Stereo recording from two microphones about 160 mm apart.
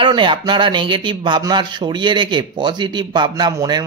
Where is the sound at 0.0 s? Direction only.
30° right (ahead or behind).